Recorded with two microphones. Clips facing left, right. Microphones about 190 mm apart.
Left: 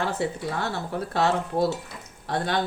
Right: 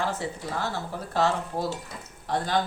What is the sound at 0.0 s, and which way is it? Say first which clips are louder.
Speech: left 3 dB; 65° left (ahead or behind).